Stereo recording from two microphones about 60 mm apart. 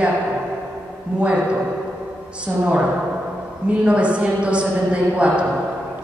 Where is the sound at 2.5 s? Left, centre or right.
Right.